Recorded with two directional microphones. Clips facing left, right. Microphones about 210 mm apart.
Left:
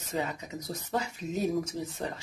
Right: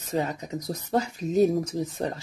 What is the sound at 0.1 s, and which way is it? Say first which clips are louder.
Speech: right 5 dB; 40° right (ahead or behind).